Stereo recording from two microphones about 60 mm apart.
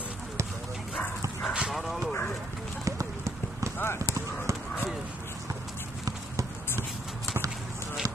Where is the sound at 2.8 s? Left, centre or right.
Right.